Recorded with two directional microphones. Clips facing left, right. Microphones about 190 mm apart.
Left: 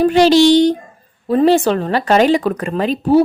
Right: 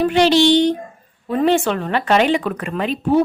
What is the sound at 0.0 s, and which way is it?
A woman's voice, 40° left (ahead or behind).